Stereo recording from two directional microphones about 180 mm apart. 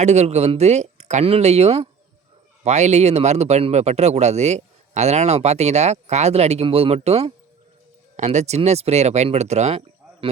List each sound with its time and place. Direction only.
0.0 s speech: 40° right (ahead or behind)